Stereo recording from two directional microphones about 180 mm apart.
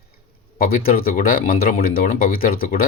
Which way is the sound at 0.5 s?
55° left (ahead or behind).